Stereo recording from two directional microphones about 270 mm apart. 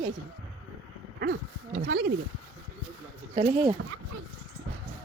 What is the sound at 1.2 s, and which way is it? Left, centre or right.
Speech, right.